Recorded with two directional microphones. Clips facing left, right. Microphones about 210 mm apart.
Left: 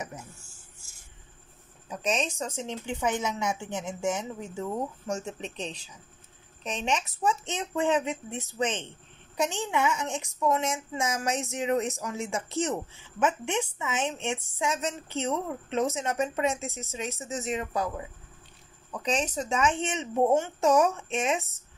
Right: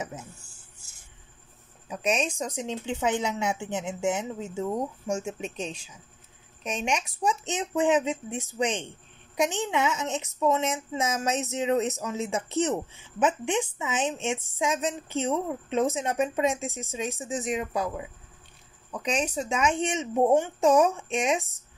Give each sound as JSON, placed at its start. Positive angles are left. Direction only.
{"t": 0.1, "sound": "a sound", "side_deg": -15}
{"t": 1.9, "sound": "a woman's voice", "side_deg": -10}
{"t": 19.0, "sound": "speech", "side_deg": -10}